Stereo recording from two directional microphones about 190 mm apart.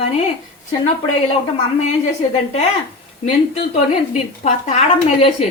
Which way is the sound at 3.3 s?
35° left (ahead or behind).